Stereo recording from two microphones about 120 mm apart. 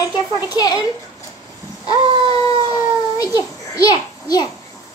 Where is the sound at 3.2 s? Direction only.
30° left (ahead or behind).